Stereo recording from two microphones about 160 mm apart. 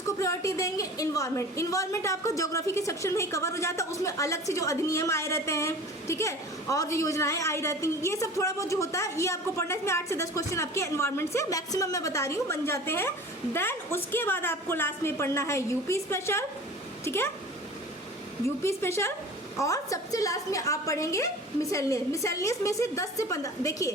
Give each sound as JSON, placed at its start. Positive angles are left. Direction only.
{"t": 0.0, "sound": "a woman's voice", "side_deg": 20}
{"t": 18.4, "sound": "a woman's voice", "side_deg": 15}